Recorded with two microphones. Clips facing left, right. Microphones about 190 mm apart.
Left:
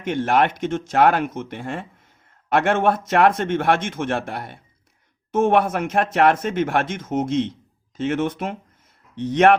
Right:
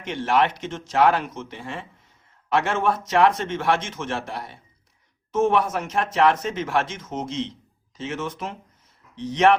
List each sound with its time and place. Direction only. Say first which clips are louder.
0.0 s speech: left 3 dB; 50° left (ahead or behind)